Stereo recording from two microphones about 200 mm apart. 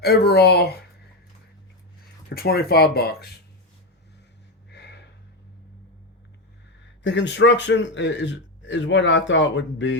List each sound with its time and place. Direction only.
0.0 s speech: 55° left (ahead or behind)
2.3 s speech: 50° left (ahead or behind)
4.7 s a sound: 60° left (ahead or behind)
7.0 s a man's voice: 65° left (ahead or behind)